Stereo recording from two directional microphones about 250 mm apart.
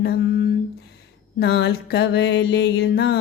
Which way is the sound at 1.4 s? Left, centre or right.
Left.